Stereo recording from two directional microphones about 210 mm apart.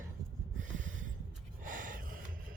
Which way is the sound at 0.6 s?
35° right (ahead or behind).